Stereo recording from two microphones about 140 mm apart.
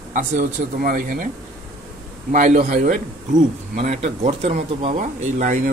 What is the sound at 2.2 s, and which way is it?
Speech, 60° right (ahead or behind).